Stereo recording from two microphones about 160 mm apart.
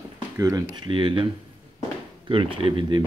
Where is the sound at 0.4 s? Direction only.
20° right (ahead or behind).